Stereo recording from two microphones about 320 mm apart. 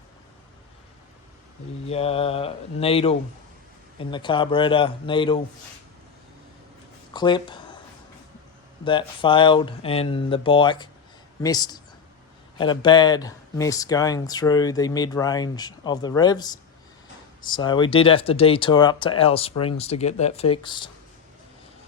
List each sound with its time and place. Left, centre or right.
1.9 s speech: centre
7.1 s speech: centre
8.8 s speech: centre